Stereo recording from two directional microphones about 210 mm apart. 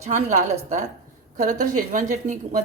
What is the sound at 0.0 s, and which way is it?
Speech, 35° right (ahead or behind).